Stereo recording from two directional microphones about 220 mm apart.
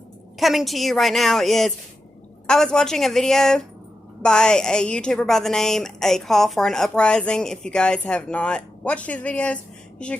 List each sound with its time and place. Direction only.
0.3 s a woman's voice: centre (ahead or behind)